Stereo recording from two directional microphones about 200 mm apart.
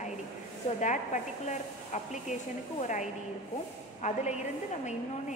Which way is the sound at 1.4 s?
35° left (ahead or behind).